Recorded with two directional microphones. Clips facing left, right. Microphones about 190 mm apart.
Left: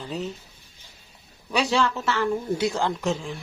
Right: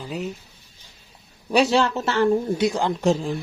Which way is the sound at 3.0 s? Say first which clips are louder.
Right 6 dB; 35° right (ahead or behind).